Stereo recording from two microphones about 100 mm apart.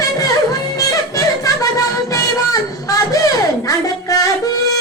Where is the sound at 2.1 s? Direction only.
35° left (ahead or behind).